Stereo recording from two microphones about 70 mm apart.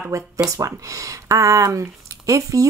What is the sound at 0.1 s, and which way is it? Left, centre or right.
Speech, right.